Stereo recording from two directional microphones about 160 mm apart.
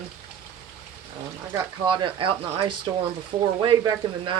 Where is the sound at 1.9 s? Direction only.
30° right (ahead or behind).